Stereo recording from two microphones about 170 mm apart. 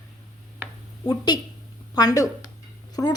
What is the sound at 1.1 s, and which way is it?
Speech, 25° left (ahead or behind).